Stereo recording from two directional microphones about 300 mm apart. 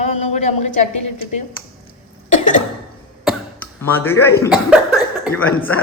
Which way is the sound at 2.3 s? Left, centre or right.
Left.